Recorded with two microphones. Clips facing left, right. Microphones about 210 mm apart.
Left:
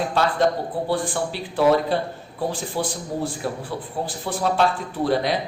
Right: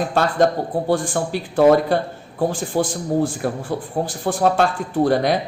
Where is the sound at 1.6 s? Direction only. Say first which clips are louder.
Right 4 dB; 50° right (ahead or behind).